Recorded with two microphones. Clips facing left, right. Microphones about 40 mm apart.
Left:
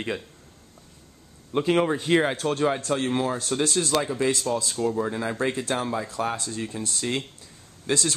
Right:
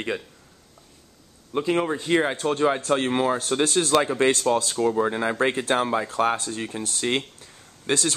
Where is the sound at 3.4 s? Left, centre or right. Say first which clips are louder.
Right 3 dB; centre.